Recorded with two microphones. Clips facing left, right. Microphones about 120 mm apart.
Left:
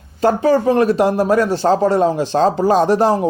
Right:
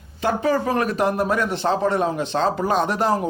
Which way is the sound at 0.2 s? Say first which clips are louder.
Left 7 dB; 35° left (ahead or behind).